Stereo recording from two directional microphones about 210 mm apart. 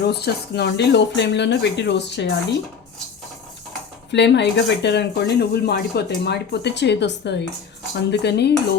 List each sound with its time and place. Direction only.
0.0 s speech: 50° left (ahead or behind)
4.1 s speech: 55° left (ahead or behind)